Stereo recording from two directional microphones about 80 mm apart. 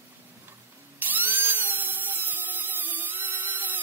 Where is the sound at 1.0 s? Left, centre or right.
Right.